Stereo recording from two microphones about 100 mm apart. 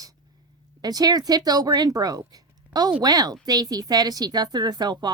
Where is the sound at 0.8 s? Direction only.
40° right (ahead or behind).